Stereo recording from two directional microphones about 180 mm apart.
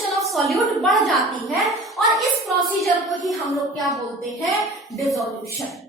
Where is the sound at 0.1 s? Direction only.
Centre (ahead or behind).